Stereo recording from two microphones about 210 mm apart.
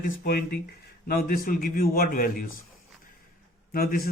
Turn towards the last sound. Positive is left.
turn(degrees=45)  # may be behind; listen again after turning